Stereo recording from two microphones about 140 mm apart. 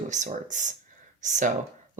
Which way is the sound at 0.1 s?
60° right (ahead or behind).